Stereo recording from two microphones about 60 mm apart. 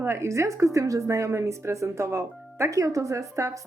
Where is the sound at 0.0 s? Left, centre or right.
Right.